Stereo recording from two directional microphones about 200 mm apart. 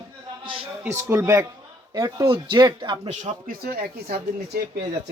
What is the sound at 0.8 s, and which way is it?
Speech, 15° right (ahead or behind).